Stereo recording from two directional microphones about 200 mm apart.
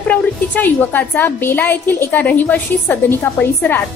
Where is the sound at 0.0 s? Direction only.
10° left (ahead or behind).